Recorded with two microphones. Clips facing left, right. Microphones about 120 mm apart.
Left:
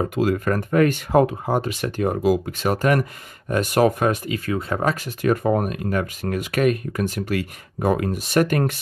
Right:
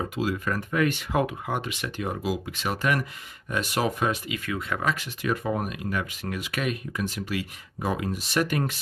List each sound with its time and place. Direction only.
0.0 s speech: 50° left (ahead or behind)